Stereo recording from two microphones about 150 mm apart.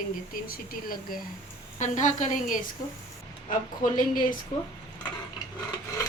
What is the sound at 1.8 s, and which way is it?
Speech, 55° left (ahead or behind).